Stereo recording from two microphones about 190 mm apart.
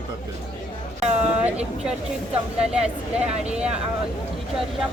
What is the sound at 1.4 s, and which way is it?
A woman's voice, 5° right (ahead or behind).